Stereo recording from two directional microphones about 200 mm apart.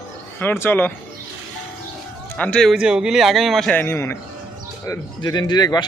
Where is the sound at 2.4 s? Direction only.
5° left (ahead or behind).